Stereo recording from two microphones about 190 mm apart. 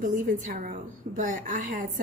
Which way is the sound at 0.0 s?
45° right (ahead or behind).